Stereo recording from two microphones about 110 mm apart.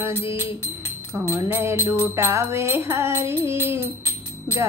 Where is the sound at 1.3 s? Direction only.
20° right (ahead or behind).